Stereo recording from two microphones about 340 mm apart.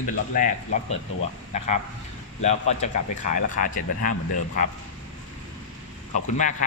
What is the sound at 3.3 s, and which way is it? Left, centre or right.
Speech, left.